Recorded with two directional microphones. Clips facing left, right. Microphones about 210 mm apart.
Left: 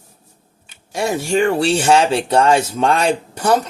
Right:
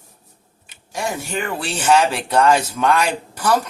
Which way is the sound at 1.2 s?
30° left (ahead or behind).